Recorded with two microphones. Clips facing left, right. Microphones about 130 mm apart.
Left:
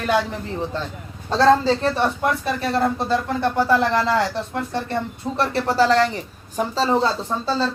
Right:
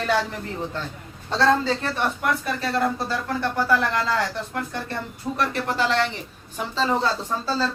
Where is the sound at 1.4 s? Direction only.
30° left (ahead or behind).